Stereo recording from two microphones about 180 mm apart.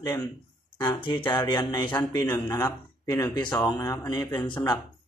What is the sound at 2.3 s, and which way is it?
A man's voice, 25° left (ahead or behind).